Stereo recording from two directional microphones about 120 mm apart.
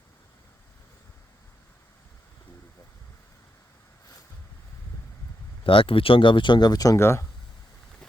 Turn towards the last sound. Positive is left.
turn(degrees=20)  # may be behind; listen again after turning